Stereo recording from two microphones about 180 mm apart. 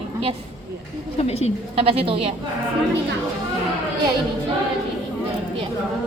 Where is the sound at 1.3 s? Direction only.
35° left (ahead or behind).